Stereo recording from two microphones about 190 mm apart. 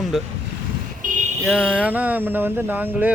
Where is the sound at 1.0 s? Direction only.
45° right (ahead or behind).